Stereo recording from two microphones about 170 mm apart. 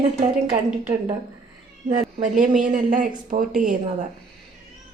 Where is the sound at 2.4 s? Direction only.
50° right (ahead or behind).